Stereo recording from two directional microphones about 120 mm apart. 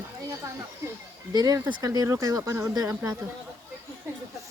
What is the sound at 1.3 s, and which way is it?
Speech, 30° right (ahead or behind).